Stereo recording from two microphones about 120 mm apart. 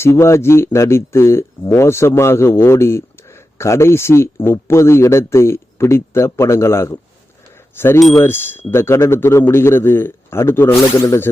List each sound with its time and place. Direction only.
0.0 s speech: 20° left (ahead or behind)